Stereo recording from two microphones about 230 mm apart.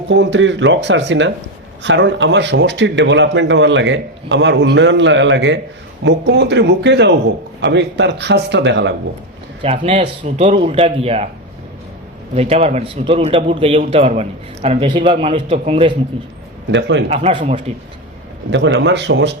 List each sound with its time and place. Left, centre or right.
0.1 s a man's voice: right
9.6 s a man's voice: right
12.3 s a man's voice: right
16.7 s a man's voice: right
17.1 s a man's voice: right
18.5 s a man's voice: right